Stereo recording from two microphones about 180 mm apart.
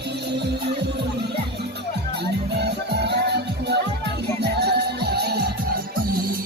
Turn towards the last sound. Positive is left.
turn(degrees=-65)  # may be behind; listen again after turning